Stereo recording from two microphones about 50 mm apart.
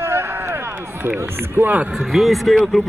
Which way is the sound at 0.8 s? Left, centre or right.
Right.